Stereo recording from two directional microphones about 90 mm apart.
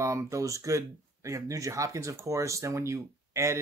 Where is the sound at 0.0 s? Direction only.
35° right (ahead or behind).